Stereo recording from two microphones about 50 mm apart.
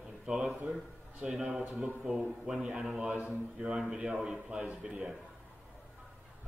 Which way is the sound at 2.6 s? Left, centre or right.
Centre.